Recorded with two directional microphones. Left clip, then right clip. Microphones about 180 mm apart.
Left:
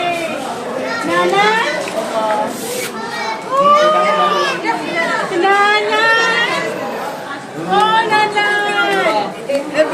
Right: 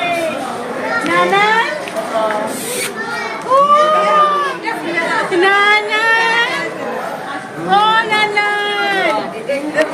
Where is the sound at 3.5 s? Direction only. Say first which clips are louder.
Right 3 dB; 70° right (ahead or behind).